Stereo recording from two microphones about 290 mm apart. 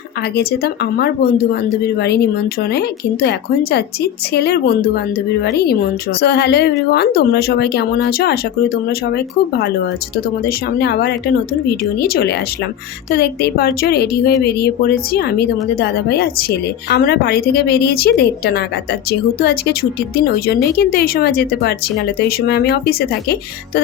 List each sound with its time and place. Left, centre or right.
0.2 s a woman's voice: left
10.8 s a woman's voice: left